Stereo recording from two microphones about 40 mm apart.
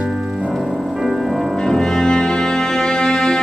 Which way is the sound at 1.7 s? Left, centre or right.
Centre.